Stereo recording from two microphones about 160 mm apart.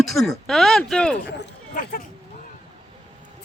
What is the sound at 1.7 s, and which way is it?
Speech, 55° left (ahead or behind).